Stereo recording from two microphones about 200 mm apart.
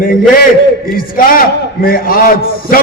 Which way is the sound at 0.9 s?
45° left (ahead or behind).